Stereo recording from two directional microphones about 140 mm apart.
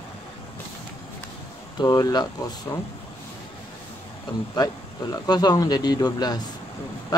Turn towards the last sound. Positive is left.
turn(degrees=30)  # may be behind; listen again after turning